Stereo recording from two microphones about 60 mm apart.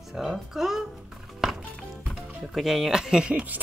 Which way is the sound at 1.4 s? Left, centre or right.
Centre.